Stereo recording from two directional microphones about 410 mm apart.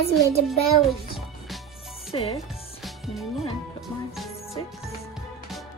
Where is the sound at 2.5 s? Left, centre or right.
Centre.